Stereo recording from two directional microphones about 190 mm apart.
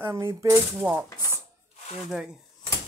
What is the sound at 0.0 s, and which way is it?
Speech, 15° right (ahead or behind).